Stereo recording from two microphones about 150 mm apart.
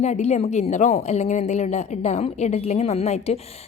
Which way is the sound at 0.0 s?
50° left (ahead or behind).